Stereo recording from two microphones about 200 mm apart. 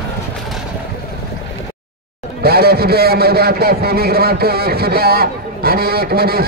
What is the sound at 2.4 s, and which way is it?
A man's voice, 50° right (ahead or behind).